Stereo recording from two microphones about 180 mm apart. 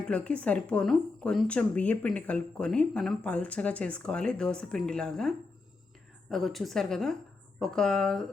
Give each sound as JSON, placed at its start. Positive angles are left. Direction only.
{"t": 0.0, "sound": "a woman's voice", "side_deg": 5}
{"t": 6.3, "sound": "a woman's voice", "side_deg": 0}